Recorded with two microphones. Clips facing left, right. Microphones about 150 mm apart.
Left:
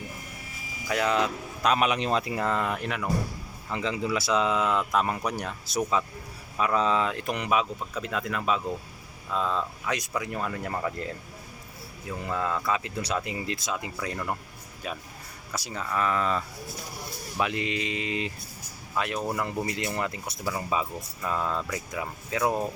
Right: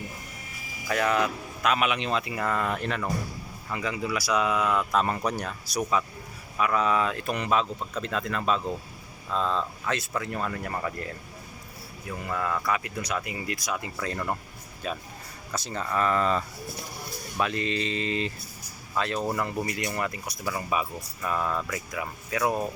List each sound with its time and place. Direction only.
0.9 s speech: 20° left (ahead or behind)
1.6 s speech: 35° left (ahead or behind)
2.4 s speech: 20° left (ahead or behind)
3.7 s speech: 25° left (ahead or behind)
12.3 s speech: 20° left (ahead or behind); by 16.4 s 5° left (ahead or behind)
17.4 s speech: 15° left (ahead or behind)